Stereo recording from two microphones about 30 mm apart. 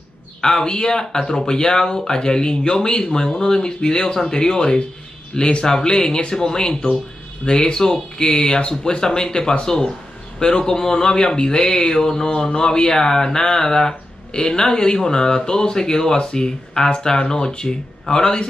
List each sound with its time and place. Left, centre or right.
0.4 s speech: left
15.0 s speech: left